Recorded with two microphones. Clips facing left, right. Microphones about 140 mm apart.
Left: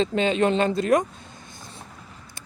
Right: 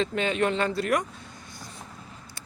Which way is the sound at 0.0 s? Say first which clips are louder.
Left 4 dB; 25° left (ahead or behind).